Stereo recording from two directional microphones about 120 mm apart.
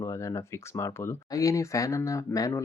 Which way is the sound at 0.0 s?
25° left (ahead or behind).